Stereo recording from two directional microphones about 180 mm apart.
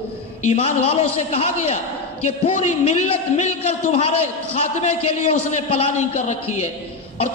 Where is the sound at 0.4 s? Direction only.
35° left (ahead or behind).